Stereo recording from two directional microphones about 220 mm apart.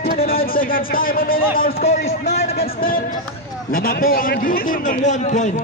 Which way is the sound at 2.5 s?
40° left (ahead or behind).